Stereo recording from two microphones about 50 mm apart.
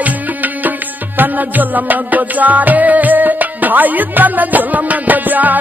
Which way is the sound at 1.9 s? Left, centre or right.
Right.